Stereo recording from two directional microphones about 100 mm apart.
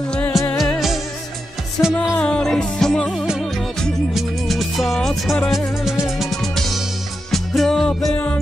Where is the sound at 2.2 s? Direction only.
10° left (ahead or behind).